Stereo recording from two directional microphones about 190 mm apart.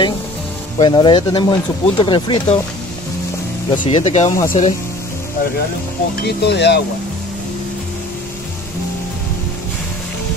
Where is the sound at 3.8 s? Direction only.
40° left (ahead or behind).